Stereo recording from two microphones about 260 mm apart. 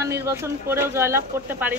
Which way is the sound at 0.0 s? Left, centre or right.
Centre.